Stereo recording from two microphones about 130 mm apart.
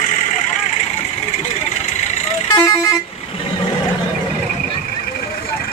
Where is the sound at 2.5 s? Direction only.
30° left (ahead or behind).